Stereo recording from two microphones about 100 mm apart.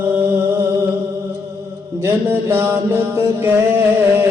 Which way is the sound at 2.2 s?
20° right (ahead or behind).